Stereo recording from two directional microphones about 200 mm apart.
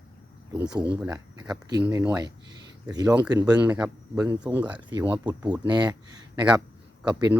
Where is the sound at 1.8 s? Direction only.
10° right (ahead or behind).